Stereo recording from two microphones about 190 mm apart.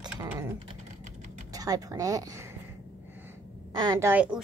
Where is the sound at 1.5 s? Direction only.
20° right (ahead or behind).